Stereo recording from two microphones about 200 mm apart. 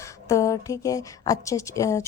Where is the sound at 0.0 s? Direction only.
15° left (ahead or behind).